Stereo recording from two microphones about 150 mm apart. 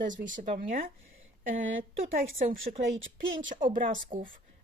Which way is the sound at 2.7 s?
40° right (ahead or behind).